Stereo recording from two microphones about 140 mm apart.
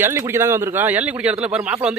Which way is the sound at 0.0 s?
20° right (ahead or behind).